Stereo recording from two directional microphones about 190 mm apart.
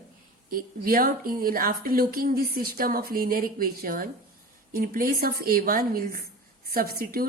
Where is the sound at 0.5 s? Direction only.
50° right (ahead or behind).